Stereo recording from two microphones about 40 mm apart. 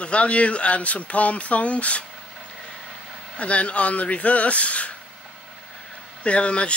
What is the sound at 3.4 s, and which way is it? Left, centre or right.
Speech, left.